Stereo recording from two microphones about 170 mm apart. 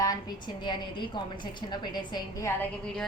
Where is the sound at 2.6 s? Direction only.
5° left (ahead or behind).